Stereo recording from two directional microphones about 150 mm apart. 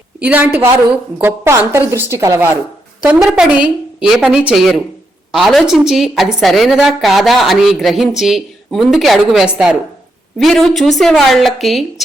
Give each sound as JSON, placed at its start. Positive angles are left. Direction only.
{"t": 0.2, "sound": "a woman's voice", "side_deg": -10}
{"t": 3.0, "sound": "a woman's voice", "side_deg": -5}